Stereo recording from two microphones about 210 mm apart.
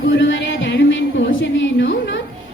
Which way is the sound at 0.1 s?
60° left (ahead or behind).